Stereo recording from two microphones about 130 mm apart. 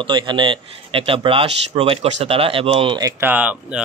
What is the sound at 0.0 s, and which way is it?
Speech, 40° right (ahead or behind).